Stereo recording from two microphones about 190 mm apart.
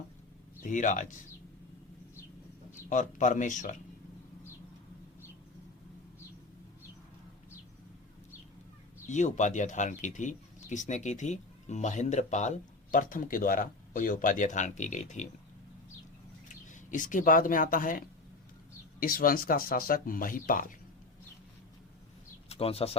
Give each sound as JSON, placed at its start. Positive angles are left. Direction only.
{"t": 0.6, "sound": "speech", "side_deg": 40}
{"t": 2.7, "sound": "speech", "side_deg": 40}
{"t": 9.0, "sound": "speech", "side_deg": 40}
{"t": 16.6, "sound": "speech", "side_deg": 40}
{"t": 22.4, "sound": "speech", "side_deg": 30}